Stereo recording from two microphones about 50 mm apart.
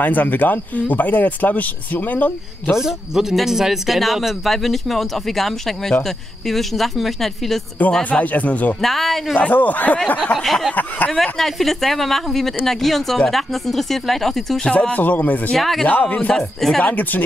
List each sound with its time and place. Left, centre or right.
0.0 s speech: left
2.7 s speech: centre
8.0 s speech: left
8.8 s speech: centre
9.3 s speech: left
10.3 s speech: centre
14.7 s speech: left
15.0 s speech: left
15.5 s speech: centre
15.9 s speech: left
16.3 s speech: centre
16.8 s speech: left